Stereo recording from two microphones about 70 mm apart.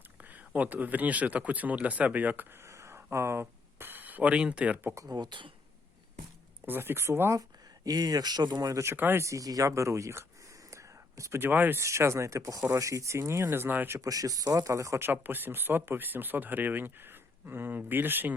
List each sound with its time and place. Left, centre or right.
0.2 s speech: right
2.6 s a sound: right; by 4.8 s centre
5.0 s speech: right
6.7 s speech: right
7.9 s speech: right
8.8 s speech: right
9.2 s speech: right
10.7 s whispering: right
11.3 s speech: right
11.8 s speech: right
14.0 s speech: right
15.0 s speech: right